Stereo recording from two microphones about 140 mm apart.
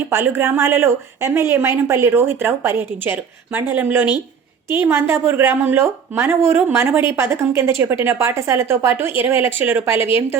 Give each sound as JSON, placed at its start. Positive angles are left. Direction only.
{"t": 0.1, "sound": "a woman's voice", "side_deg": -15}